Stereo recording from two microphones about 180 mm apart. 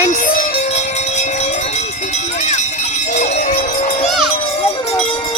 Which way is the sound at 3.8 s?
40° left (ahead or behind).